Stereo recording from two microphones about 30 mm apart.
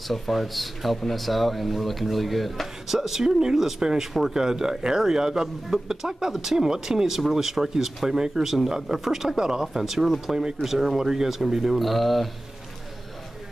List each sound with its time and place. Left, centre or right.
0.1 s speech: centre
2.9 s speech: centre
4.3 s speech: centre
9.4 s speech: right
9.8 s speech: centre
10.2 s speech: centre
10.6 s speech: centre
11.7 s speech: centre